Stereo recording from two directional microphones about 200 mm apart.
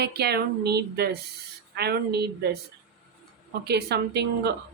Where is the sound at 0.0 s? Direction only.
55° right (ahead or behind).